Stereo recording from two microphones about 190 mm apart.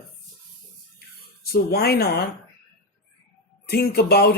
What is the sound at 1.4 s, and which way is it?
Speech, 55° left (ahead or behind).